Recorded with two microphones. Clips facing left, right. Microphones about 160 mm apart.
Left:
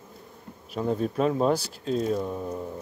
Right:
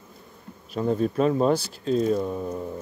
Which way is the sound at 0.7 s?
Centre (ahead or behind).